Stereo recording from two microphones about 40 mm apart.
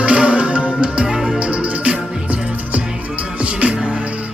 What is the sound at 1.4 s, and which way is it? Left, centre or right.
Music, right.